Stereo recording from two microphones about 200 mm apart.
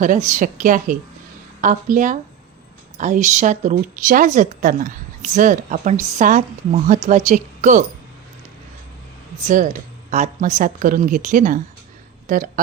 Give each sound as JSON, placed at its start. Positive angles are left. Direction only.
{"t": 0.0, "sound": "speech", "side_deg": -40}
{"t": 10.1, "sound": "speech", "side_deg": -35}